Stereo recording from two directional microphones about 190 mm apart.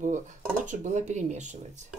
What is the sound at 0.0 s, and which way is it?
Speech, 40° right (ahead or behind).